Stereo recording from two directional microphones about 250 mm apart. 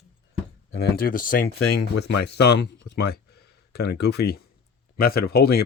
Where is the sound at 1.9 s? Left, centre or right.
Left.